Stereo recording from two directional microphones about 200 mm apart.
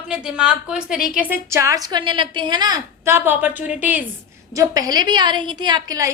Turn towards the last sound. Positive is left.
turn(degrees=-20)  # may be behind; listen again after turning